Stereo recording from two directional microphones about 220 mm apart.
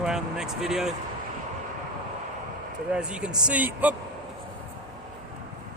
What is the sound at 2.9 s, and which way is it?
Speech, 5° right (ahead or behind).